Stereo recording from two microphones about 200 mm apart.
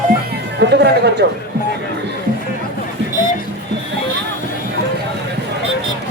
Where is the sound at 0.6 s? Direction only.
55° right (ahead or behind).